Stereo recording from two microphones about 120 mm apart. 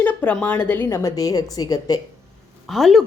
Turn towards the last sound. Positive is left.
turn(degrees=0)  # may be behind; listen again after turning